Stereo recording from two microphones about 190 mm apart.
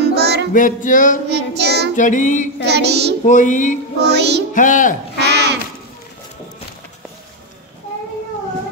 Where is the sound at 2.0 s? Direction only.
40° left (ahead or behind).